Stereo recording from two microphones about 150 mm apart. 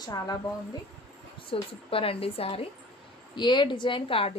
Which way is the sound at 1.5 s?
40° left (ahead or behind).